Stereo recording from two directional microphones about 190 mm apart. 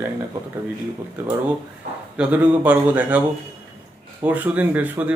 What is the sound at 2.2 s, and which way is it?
Speech, 10° right (ahead or behind).